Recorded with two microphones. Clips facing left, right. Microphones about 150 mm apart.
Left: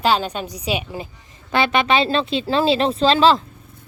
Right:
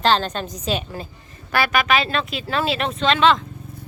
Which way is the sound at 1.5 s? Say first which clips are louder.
Left 2 dB; 25° left (ahead or behind).